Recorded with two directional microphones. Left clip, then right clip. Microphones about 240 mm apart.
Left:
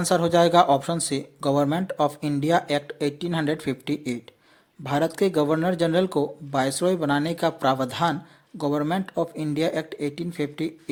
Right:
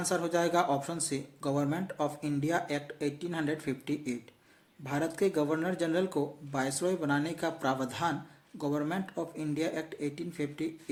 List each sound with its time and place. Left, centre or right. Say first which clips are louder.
0.0 s speech: left 10 dB; left